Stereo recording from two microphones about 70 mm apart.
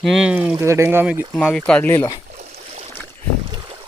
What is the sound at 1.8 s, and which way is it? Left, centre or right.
Speech, left.